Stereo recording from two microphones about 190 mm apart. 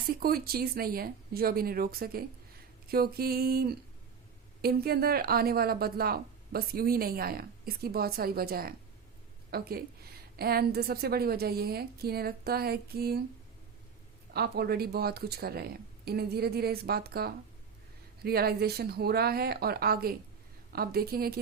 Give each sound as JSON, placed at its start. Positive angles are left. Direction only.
{"t": 0.1, "sound": "speech", "side_deg": -50}
{"t": 14.3, "sound": "speech", "side_deg": -55}